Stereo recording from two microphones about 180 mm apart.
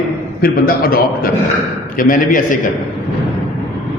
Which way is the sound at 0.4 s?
55° left (ahead or behind).